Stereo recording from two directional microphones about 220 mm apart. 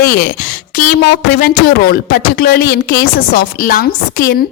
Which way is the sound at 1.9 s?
45° left (ahead or behind).